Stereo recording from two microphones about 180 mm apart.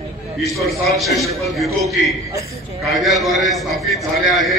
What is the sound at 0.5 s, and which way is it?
A man's voice, centre (ahead or behind).